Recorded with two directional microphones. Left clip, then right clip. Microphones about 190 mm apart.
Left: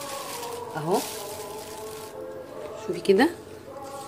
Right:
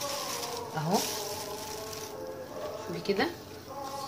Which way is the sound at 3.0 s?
50° left (ahead or behind).